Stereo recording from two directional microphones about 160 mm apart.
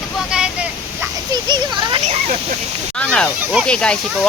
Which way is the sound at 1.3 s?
30° right (ahead or behind).